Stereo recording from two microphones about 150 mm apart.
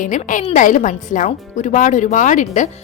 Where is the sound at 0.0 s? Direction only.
60° left (ahead or behind).